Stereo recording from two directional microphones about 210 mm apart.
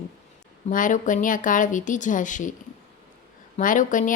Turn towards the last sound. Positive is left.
turn(degrees=40)  # may be behind; listen again after turning